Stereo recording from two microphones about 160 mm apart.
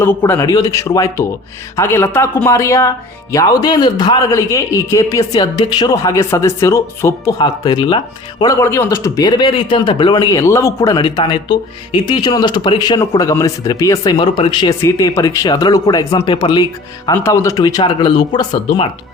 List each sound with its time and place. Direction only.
0.0 s a man's voice: 15° left (ahead or behind); by 18.9 s 30° left (ahead or behind)